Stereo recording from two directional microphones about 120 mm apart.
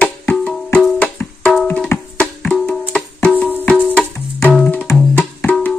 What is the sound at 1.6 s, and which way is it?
Tabla, 5° left (ahead or behind).